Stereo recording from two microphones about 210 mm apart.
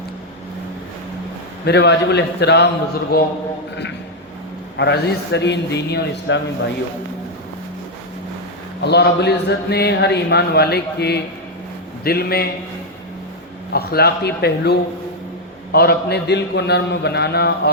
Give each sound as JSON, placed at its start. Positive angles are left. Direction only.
{"t": 1.6, "sound": "speech", "side_deg": 55}
{"t": 4.8, "sound": "a man's voice", "side_deg": 55}
{"t": 8.8, "sound": "speech", "side_deg": 50}
{"t": 13.7, "sound": "speech", "side_deg": 50}